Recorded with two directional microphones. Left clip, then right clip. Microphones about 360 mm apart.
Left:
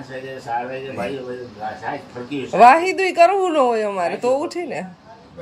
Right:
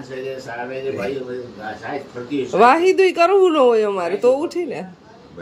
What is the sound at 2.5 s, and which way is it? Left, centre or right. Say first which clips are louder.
A woman's voice: left 2 dB; centre.